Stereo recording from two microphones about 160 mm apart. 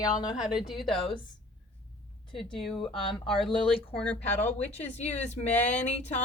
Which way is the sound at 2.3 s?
5° left (ahead or behind).